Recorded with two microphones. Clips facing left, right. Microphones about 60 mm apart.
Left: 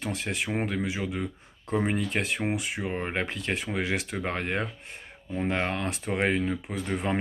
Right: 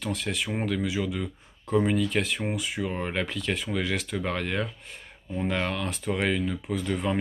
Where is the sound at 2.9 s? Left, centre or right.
Left.